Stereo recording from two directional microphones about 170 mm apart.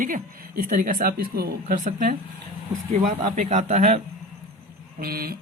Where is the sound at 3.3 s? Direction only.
45° right (ahead or behind).